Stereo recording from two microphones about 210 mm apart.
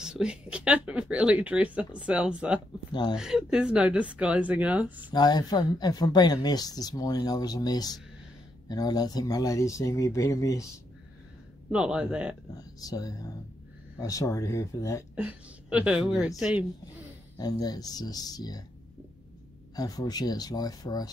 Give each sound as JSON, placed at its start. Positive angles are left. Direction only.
{"t": 0.0, "sound": "speech", "side_deg": -5}
{"t": 2.9, "sound": "speech", "side_deg": 20}
{"t": 3.2, "sound": "speech", "side_deg": -5}
{"t": 5.1, "sound": "speech", "side_deg": 20}
{"t": 11.7, "sound": "speech", "side_deg": -5}
{"t": 12.5, "sound": "speech", "side_deg": 20}
{"t": 15.1, "sound": "speech", "side_deg": -5}
{"t": 17.4, "sound": "speech", "side_deg": 20}
{"t": 19.7, "sound": "speech", "side_deg": 20}